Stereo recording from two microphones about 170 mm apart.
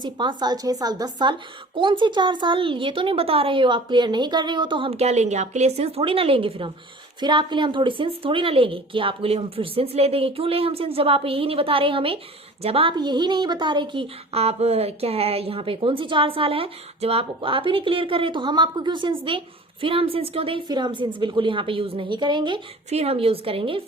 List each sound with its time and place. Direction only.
0.0 s a woman's voice: 25° right (ahead or behind)